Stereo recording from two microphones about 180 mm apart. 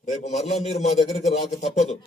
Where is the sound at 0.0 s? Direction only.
40° left (ahead or behind).